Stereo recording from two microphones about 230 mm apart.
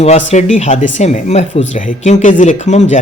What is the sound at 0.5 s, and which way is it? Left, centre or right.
Speech, left.